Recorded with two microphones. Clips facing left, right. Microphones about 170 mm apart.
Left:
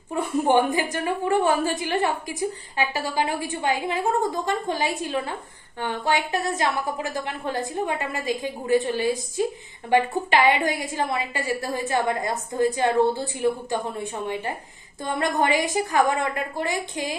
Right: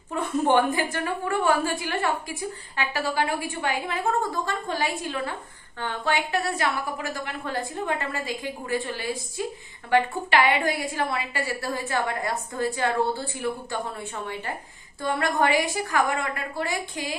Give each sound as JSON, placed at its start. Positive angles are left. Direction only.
{"t": 0.1, "sound": "a woman's voice", "side_deg": 10}